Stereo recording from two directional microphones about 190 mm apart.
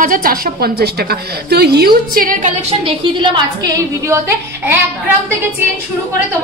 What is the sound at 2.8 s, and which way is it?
A woman's voice, 20° right (ahead or behind).